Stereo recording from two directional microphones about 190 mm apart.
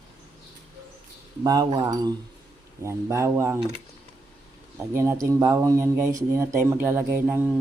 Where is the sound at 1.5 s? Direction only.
20° right (ahead or behind).